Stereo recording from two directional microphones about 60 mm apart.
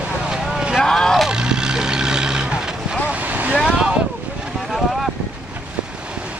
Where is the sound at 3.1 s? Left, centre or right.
Right.